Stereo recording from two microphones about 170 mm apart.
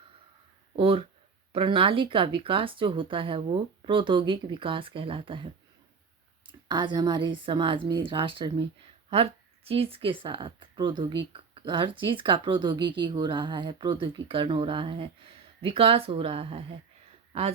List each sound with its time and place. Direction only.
0.8 s speech: 30° right (ahead or behind)
6.7 s speech: 25° right (ahead or behind)
9.6 s speech: 35° right (ahead or behind)